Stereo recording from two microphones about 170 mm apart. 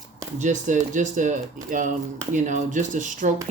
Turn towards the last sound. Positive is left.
turn(degrees=-50)  # may be behind; listen again after turning